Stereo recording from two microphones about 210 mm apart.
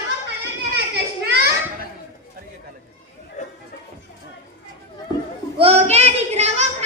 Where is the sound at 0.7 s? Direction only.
50° right (ahead or behind).